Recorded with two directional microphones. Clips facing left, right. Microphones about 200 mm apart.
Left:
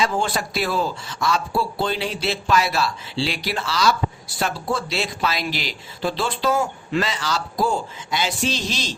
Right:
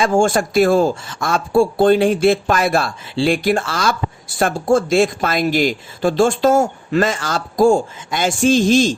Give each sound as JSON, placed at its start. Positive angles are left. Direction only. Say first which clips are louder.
{"t": 0.0, "sound": "speech", "louder": "right 8 dB", "side_deg": -50}